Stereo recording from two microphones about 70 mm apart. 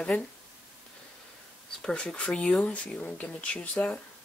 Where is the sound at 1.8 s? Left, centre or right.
Centre.